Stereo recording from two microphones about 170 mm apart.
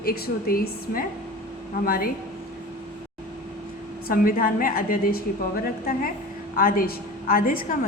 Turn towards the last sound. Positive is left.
turn(degrees=55)  # may be behind; listen again after turning